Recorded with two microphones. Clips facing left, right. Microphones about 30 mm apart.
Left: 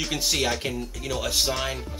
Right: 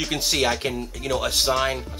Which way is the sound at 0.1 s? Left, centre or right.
Centre.